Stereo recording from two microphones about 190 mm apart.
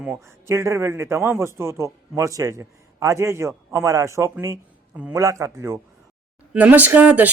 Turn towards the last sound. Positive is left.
turn(degrees=-10)  # may be behind; listen again after turning